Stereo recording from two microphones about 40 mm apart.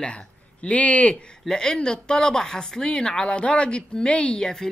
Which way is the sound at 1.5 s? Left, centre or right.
Centre.